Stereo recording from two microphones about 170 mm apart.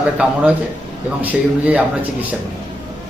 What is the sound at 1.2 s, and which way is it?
Speech, 10° right (ahead or behind).